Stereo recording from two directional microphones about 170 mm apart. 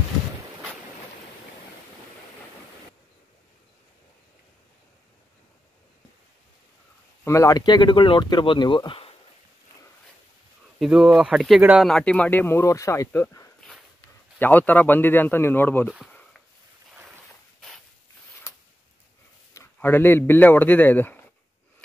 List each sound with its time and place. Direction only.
7.2 s speech: 20° left (ahead or behind)
10.8 s speech: 5° right (ahead or behind); by 15.9 s 10° left (ahead or behind)
16.1 s a sound: 10° left (ahead or behind)
19.5 s a man's voice: 15° left (ahead or behind)